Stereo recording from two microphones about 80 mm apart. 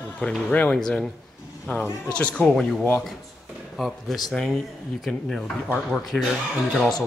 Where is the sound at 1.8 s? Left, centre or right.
Centre.